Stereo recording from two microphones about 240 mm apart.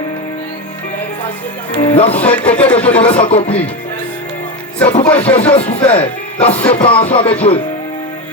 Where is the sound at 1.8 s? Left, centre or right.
Left.